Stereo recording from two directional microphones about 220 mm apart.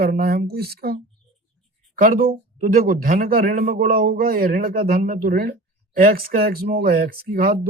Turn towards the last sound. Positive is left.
turn(degrees=-40)  # may be behind; listen again after turning